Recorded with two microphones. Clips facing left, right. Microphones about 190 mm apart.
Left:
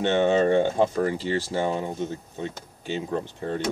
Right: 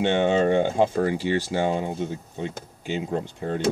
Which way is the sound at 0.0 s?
15° right (ahead or behind).